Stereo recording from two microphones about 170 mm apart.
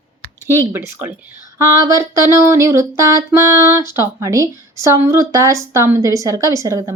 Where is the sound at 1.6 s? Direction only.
20° right (ahead or behind).